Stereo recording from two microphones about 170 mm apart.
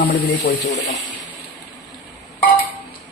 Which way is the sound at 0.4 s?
90° left.